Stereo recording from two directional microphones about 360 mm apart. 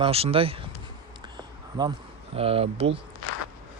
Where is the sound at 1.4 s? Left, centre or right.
Centre.